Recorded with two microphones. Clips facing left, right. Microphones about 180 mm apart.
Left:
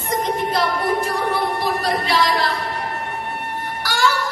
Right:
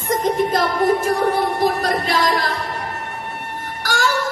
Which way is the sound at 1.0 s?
45° right (ahead or behind).